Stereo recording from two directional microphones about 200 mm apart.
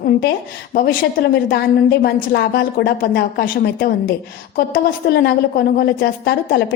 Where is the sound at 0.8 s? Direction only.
50° left (ahead or behind).